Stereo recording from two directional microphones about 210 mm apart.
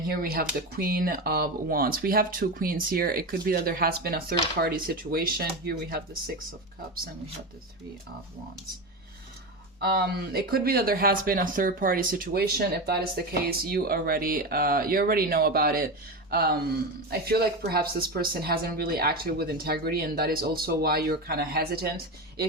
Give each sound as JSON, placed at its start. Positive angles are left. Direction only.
{"t": 0.1, "sound": "speech", "side_deg": -45}
{"t": 9.8, "sound": "speech", "side_deg": -45}